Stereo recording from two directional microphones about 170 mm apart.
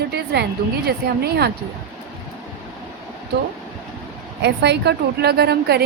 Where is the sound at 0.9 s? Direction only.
70° right (ahead or behind).